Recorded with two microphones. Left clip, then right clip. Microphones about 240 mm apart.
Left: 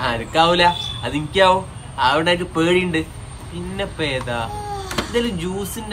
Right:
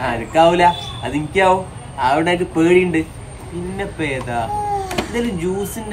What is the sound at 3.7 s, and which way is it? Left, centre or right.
Speech, left.